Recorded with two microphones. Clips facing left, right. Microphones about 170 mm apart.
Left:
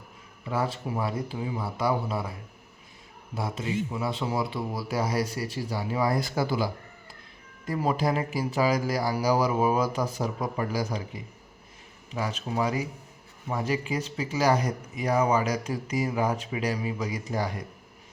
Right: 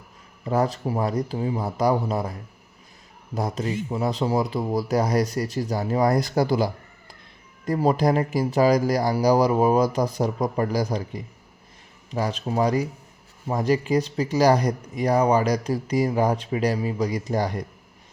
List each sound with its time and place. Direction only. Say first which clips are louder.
0.4 s speech: right 6 dB; 40° right (ahead or behind)
3.3 s speech: right 3 dB; 40° right (ahead or behind)
7.7 s speech: right 6 dB; 40° right (ahead or behind)